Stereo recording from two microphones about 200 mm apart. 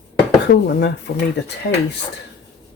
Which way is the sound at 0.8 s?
60° left (ahead or behind).